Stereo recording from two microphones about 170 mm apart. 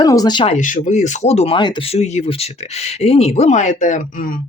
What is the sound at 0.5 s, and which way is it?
Speech, 45° left (ahead or behind).